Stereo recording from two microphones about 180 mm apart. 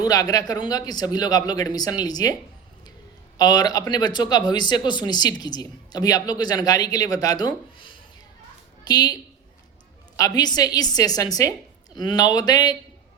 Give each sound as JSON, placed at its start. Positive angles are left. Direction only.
{"t": 0.0, "sound": "speech", "side_deg": 20}
{"t": 3.3, "sound": "a woman's voice", "side_deg": 20}
{"t": 10.2, "sound": "speech", "side_deg": 20}